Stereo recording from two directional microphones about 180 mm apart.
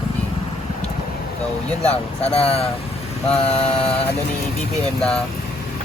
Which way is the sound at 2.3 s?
35° left (ahead or behind).